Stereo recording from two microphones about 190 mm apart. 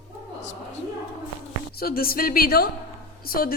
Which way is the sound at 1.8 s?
50° left (ahead or behind).